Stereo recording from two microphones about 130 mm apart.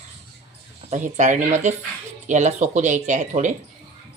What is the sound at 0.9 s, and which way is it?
Speech, 70° right (ahead or behind).